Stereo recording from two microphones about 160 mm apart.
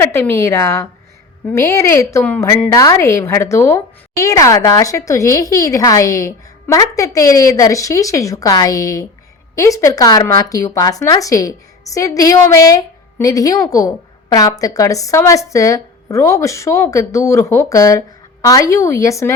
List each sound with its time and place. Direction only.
0.0 s a woman's voice: 15° left (ahead or behind)